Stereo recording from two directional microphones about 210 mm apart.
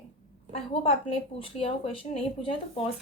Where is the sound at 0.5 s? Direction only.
30° left (ahead or behind).